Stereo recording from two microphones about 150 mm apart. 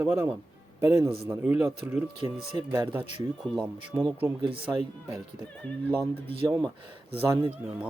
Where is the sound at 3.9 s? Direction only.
15° right (ahead or behind).